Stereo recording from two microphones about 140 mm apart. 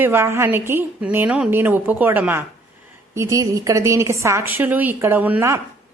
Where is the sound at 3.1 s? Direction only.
25° right (ahead or behind).